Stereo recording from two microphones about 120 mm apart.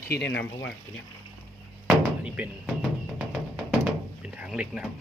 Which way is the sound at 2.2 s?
15° right (ahead or behind).